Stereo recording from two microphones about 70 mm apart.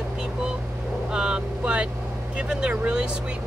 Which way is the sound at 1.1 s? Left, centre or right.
Centre.